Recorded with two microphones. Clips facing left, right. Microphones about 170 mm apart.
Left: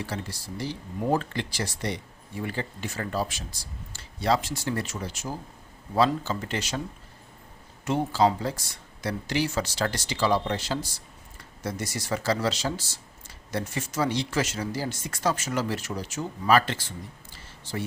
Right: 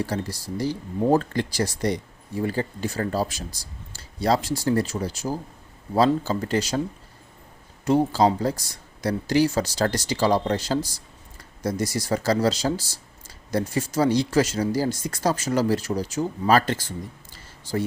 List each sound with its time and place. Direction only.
0.0 s speech: 40° right (ahead or behind)
7.9 s speech: 40° right (ahead or behind)
17.3 s a sound: 40° right (ahead or behind)